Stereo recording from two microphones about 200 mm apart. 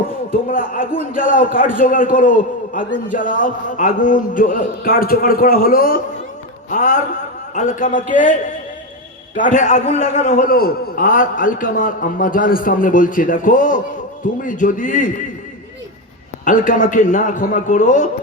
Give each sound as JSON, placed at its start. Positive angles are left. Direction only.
{"t": 0.3, "sound": "a man's voice", "side_deg": 45}
{"t": 16.5, "sound": "a man's voice", "side_deg": 40}